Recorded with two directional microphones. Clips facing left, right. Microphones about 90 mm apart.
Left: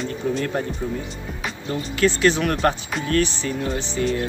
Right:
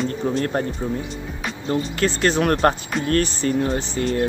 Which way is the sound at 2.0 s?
40° right (ahead or behind).